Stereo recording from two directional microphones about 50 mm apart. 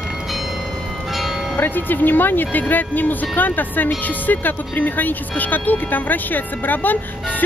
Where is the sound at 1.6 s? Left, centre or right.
Left.